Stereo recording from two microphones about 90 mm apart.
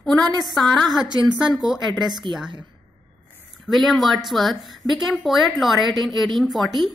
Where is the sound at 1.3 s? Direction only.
5° right (ahead or behind).